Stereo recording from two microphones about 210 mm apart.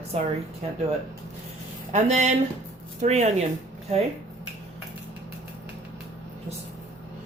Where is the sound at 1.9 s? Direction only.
35° right (ahead or behind).